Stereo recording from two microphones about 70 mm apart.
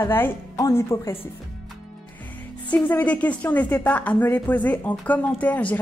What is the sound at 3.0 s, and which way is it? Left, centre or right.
Speech, left.